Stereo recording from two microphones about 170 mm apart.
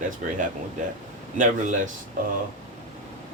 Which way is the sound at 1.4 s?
50° right (ahead or behind).